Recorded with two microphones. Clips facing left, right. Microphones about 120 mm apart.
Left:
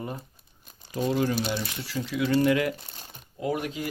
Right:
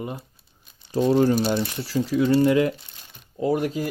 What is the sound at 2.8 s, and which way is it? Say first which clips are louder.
Crumpling: left 4 dB; 40° left (ahead or behind).